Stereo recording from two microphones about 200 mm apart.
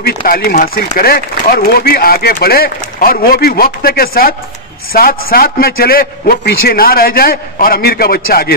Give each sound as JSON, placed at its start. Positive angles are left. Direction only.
{"t": 0.0, "sound": "speech", "side_deg": 50}